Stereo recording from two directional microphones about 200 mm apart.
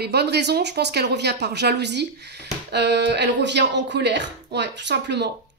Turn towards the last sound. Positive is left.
turn(degrees=-60)  # may be behind; listen again after turning